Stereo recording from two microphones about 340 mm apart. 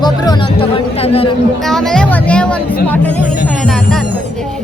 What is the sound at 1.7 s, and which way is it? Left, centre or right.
Speech, centre.